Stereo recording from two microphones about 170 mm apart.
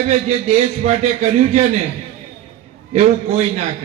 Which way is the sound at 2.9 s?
40° right (ahead or behind).